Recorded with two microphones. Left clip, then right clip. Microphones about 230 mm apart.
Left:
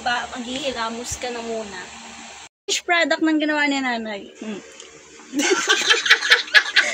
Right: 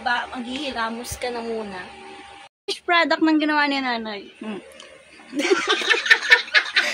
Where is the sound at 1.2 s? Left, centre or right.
Right.